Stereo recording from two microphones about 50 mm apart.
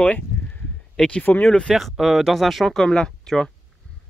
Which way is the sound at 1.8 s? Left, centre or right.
Centre.